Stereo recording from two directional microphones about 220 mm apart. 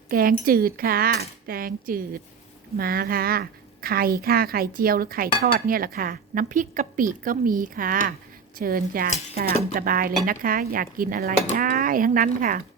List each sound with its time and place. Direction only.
0.1 s a woman's voice: 40° right (ahead or behind)